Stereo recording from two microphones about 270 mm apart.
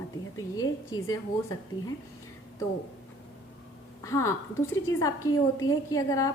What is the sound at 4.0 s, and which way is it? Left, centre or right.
Speech, centre.